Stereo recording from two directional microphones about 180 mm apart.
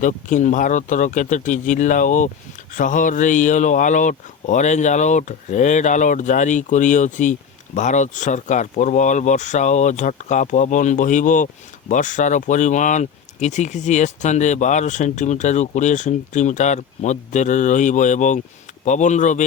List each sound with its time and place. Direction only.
0.0 s speech: 45° left (ahead or behind)